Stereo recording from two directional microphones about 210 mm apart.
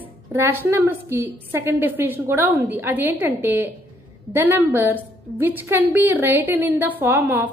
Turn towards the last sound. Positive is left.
turn(degrees=-10)  # may be behind; listen again after turning